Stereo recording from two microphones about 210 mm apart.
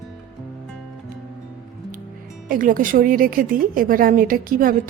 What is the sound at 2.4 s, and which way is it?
Speech, 40° right (ahead or behind).